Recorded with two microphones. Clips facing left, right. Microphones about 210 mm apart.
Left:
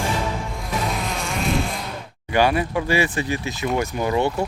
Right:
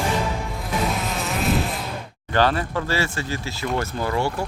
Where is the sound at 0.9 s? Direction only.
Centre (ahead or behind).